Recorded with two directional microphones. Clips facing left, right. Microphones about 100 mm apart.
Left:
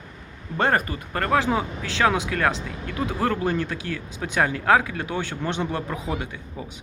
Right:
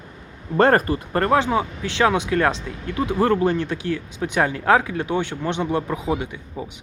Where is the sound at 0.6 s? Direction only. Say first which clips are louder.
Right 6 dB; 40° right (ahead or behind).